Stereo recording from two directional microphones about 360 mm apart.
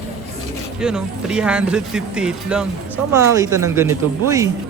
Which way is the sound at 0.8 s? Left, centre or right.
Centre.